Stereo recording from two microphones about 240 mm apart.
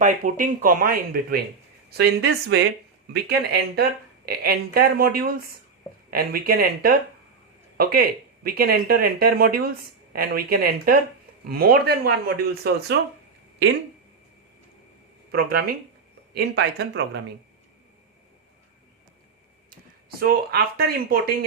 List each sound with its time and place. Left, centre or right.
0.0 s speech: right
15.3 s speech: right
20.1 s speech: right